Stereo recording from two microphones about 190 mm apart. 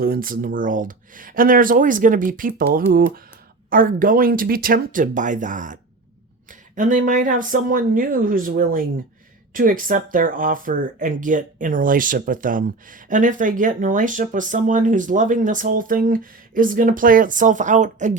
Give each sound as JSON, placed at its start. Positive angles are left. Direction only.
{"t": 0.0, "sound": "speech", "side_deg": -50}
{"t": 3.7, "sound": "speech", "side_deg": -45}